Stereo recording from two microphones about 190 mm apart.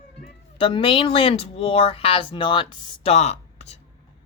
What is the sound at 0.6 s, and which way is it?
Speech, 25° left (ahead or behind).